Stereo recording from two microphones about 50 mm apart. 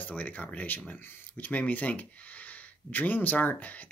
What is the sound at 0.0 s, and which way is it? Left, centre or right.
Speech, left.